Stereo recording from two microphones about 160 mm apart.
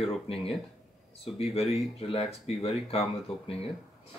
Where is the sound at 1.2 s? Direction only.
40° left (ahead or behind).